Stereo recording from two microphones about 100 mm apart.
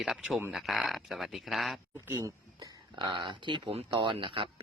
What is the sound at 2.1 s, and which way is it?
Speech, 35° right (ahead or behind).